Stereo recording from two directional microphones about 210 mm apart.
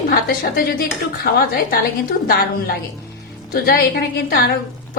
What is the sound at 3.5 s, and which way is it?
Speech, 45° left (ahead or behind).